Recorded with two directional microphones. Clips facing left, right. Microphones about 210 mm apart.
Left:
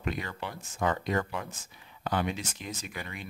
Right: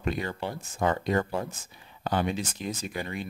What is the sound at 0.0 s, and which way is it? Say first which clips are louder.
Speech: right 4 dB; 30° right (ahead or behind).